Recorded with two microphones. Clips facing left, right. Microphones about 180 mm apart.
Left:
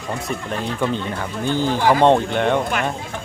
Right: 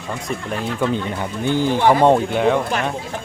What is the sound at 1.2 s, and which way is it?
Speech, 15° right (ahead or behind).